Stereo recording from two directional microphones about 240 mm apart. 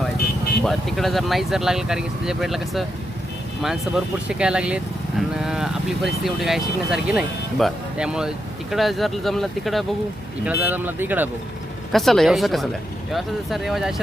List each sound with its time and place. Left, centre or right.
0.6 s speech: centre